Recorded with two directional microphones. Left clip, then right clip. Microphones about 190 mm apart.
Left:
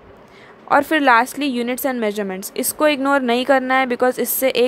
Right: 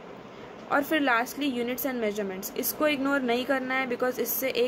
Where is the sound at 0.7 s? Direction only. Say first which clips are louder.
Left 11 dB; 45° left (ahead or behind).